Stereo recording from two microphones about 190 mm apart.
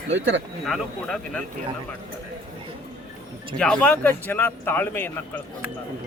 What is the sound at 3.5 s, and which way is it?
Speech, 5° left (ahead or behind).